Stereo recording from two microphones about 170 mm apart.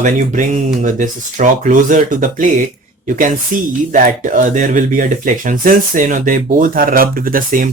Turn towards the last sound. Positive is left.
turn(degrees=-55)  # may be behind; listen again after turning